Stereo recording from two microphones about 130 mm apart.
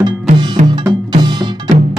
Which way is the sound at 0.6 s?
70° right (ahead or behind).